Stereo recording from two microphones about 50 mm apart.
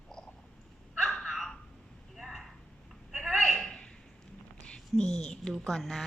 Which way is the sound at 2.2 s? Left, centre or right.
Centre.